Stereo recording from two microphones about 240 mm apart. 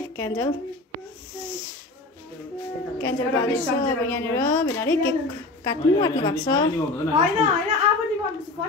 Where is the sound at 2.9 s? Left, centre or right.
Centre.